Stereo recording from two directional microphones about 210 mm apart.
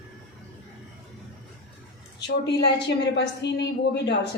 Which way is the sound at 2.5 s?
50° left (ahead or behind).